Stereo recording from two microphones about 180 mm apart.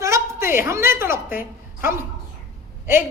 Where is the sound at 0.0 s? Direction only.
15° right (ahead or behind).